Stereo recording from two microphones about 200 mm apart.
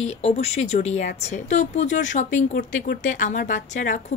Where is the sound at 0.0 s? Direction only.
30° left (ahead or behind).